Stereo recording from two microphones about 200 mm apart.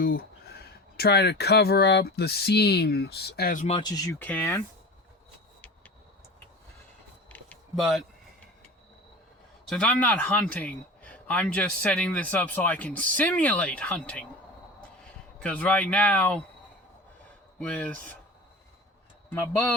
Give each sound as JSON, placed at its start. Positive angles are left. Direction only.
{"t": 0.0, "sound": "speech", "side_deg": 50}
{"t": 3.8, "sound": "speech", "side_deg": 20}
{"t": 4.2, "sound": "speech", "side_deg": 10}
{"t": 7.3, "sound": "a sound", "side_deg": 5}
{"t": 9.6, "sound": "speech", "side_deg": 5}
{"t": 15.4, "sound": "speech", "side_deg": 5}
{"t": 17.6, "sound": "speech", "side_deg": 5}